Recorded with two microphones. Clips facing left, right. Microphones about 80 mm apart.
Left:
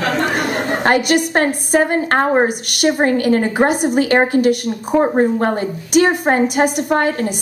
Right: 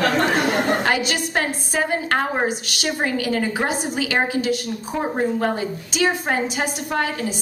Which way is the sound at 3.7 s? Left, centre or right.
Left.